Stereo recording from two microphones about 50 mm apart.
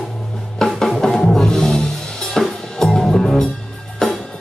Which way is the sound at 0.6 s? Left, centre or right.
Centre.